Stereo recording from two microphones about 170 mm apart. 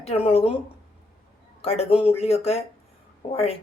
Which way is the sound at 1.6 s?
35° left (ahead or behind).